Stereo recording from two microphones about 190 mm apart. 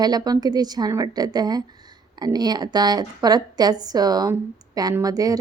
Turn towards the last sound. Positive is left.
turn(degrees=-20)  # may be behind; listen again after turning